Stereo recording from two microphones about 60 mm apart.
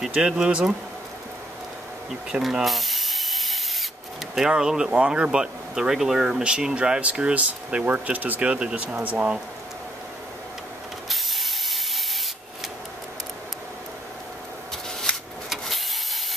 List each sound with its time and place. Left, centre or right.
0.4 s speech: centre
2.4 s ratchet: centre
4.4 s speech: centre
11.1 s a sound: centre
15.1 s a sound: centre
15.5 s vehicle: centre